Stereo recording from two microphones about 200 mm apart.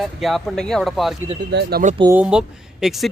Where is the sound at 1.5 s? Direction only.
50° right (ahead or behind).